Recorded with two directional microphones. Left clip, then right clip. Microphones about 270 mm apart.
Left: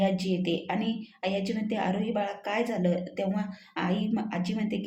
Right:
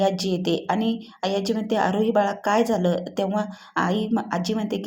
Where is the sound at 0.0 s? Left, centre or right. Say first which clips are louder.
Right 6 dB; centre.